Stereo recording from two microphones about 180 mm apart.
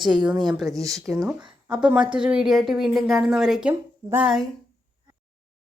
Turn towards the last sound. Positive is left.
turn(degrees=-5)  # may be behind; listen again after turning